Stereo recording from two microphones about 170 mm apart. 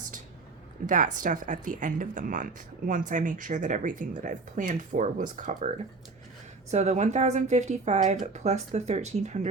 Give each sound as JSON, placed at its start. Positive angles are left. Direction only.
{"t": 0.9, "sound": "speech", "side_deg": -50}